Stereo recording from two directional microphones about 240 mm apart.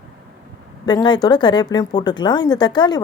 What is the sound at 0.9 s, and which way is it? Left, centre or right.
Speech, centre.